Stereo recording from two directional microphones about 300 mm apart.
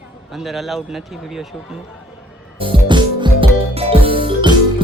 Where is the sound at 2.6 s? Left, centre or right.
Centre.